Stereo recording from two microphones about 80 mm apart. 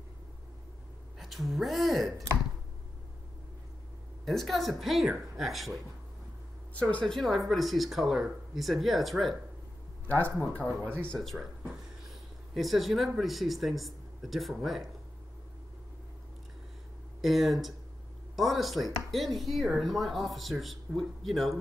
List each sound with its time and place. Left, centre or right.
1.2 s speech: centre
4.3 s speech: centre
6.7 s speech: centre
7.2 s speech: centre
10.0 s speech: centre
12.5 s speech: centre
17.2 s speech: centre